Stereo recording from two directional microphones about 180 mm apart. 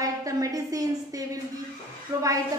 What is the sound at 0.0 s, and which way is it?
A woman's voice, 20° right (ahead or behind).